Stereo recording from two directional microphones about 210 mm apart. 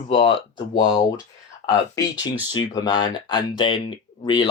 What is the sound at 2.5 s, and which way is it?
Speech, 20° left (ahead or behind).